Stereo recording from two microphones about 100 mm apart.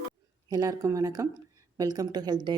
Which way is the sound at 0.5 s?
35° right (ahead or behind).